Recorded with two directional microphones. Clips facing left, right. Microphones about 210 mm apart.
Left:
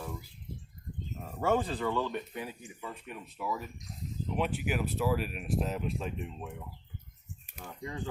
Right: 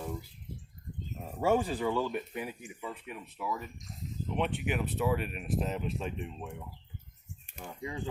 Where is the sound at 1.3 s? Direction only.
10° right (ahead or behind).